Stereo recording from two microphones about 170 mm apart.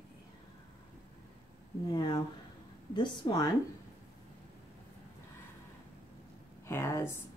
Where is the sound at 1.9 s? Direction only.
25° left (ahead or behind).